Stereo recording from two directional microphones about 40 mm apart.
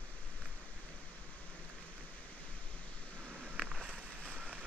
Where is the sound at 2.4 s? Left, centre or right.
Left.